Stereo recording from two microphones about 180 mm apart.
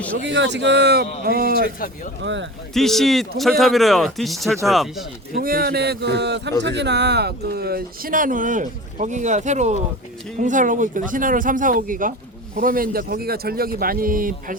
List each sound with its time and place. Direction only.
0.3 s speech: 80° right
1.2 s speech: 55° right (ahead or behind)
1.8 s speech: 55° left (ahead or behind)
2.2 s speech: 90° right
2.7 s speech: centre (ahead or behind)
5.4 s speech: 55° right (ahead or behind)